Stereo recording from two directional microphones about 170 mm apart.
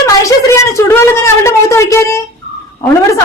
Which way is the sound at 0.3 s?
20° left (ahead or behind).